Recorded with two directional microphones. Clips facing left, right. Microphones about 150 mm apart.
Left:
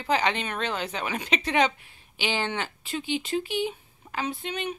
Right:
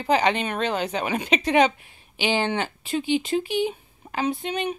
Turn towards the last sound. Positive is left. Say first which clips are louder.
# right 5 dB
turn(degrees=-15)  # may be behind; listen again after turning